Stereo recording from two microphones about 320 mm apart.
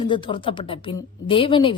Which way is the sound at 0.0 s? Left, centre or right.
Centre.